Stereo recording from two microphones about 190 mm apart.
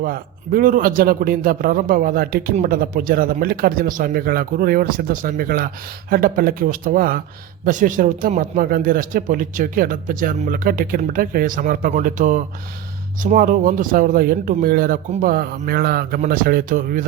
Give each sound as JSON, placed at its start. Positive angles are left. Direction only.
{"t": 0.0, "sound": "a man's voice", "side_deg": -50}